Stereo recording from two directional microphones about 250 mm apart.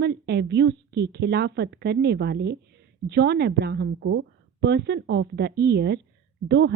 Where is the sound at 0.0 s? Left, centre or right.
Right.